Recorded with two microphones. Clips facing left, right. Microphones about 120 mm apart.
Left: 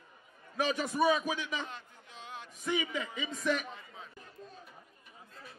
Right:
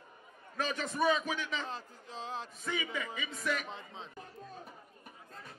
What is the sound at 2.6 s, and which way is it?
A man's voice, 15° left (ahead or behind).